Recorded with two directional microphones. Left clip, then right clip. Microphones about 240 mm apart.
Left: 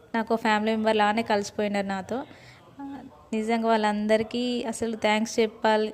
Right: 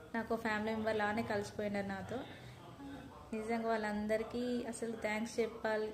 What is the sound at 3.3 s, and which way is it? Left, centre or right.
A woman's voice, left.